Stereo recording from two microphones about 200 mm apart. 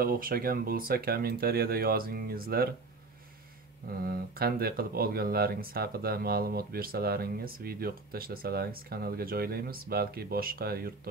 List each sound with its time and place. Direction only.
0.0 s speech: 45° right (ahead or behind)
4.0 s speech: 50° right (ahead or behind)